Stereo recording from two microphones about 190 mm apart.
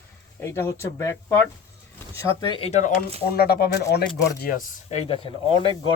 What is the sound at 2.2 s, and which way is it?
Speech, 20° left (ahead or behind).